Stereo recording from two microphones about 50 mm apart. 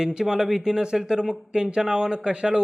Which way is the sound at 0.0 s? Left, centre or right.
Centre.